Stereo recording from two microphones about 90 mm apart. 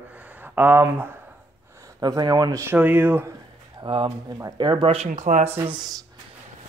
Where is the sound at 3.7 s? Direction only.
75° right (ahead or behind).